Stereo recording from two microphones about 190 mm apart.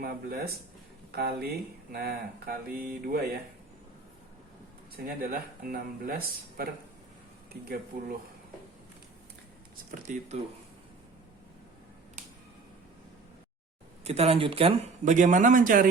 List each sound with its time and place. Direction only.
0.0 s speech: 55° right (ahead or behind)
5.0 s speech: 50° right (ahead or behind)
9.9 s speech: 40° right (ahead or behind)
14.0 s speech: 35° right (ahead or behind)